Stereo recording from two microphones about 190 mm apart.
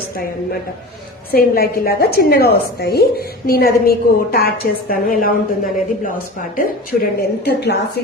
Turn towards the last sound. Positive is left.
turn(degrees=60)  # may be behind; listen again after turning